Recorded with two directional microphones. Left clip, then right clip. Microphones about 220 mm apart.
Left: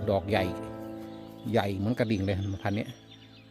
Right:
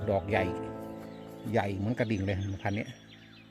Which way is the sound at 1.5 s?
10° left (ahead or behind).